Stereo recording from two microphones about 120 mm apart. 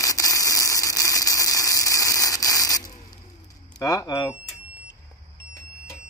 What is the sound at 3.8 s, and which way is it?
Speech, 30° left (ahead or behind).